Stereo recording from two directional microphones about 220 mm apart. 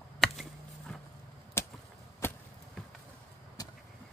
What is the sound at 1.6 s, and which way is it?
Chop, 10° left (ahead or behind).